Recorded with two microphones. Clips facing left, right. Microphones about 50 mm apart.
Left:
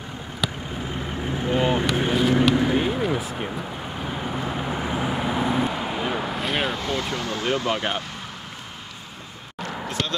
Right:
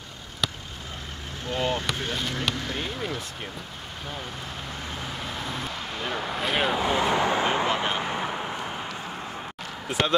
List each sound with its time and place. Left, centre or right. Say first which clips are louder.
1.3 s vehicle: left 5 dB; centre
2.0 s basketball bounce: left 10 dB; centre
4.1 s vehicle: left 8 dB; left; by 6.8 s centre
6.8 s vehicle: right 4 dB; centre
9.8 s speech: right 4 dB; centre